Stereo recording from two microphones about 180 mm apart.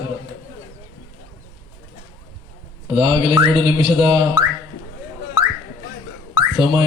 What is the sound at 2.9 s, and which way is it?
A man's voice, 30° right (ahead or behind).